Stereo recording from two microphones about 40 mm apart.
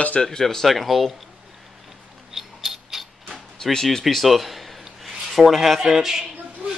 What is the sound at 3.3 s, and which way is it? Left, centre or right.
Speech, centre.